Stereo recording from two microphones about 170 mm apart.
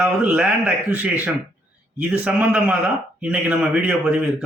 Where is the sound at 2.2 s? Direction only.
5° right (ahead or behind).